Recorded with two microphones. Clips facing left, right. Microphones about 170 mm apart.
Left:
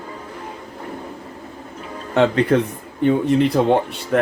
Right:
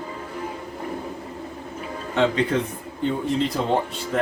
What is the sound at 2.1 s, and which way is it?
Speech, 60° left (ahead or behind).